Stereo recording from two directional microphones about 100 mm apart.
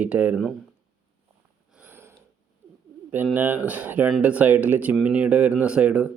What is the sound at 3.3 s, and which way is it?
Speech, 20° right (ahead or behind).